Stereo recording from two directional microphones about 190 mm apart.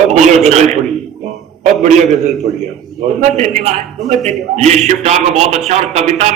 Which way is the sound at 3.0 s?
35° right (ahead or behind).